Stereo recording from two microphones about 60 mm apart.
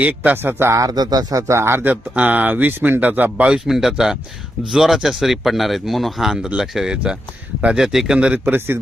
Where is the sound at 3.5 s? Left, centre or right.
Centre.